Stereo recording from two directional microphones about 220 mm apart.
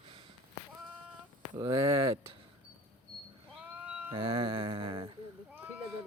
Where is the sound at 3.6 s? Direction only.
5° right (ahead or behind).